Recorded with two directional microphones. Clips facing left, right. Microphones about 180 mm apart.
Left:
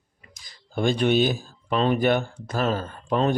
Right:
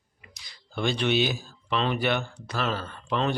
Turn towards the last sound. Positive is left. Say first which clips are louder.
# left 5 dB
turn(degrees=45)  # may be behind; listen again after turning